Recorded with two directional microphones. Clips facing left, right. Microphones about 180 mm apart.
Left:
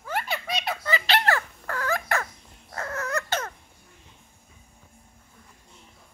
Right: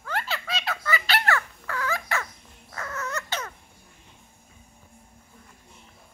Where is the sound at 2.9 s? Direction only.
55° left (ahead or behind).